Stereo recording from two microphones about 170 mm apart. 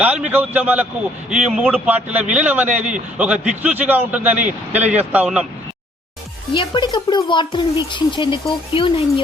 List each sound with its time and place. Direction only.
0.0 s a man's voice: 10° right (ahead or behind)
6.5 s speech: 25° left (ahead or behind)